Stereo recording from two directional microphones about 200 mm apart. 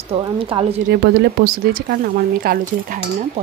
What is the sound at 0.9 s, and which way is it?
Speech, 55° right (ahead or behind).